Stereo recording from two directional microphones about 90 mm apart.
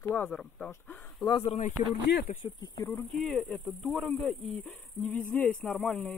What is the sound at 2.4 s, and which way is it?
Speech, 55° left (ahead or behind).